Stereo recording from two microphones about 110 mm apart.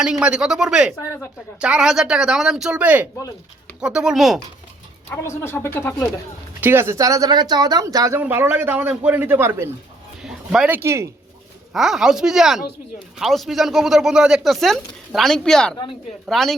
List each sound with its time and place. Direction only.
0.0 s speech: 10° right (ahead or behind)
5.0 s speech: 25° left (ahead or behind)
6.6 s speech: 20° right (ahead or behind)
10.2 s a sound: 5° right (ahead or behind)
10.7 s speech: 25° right (ahead or behind)
11.7 s speech: 5° right (ahead or behind)